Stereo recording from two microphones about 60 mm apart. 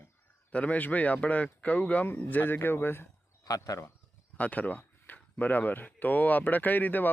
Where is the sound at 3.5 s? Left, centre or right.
Left.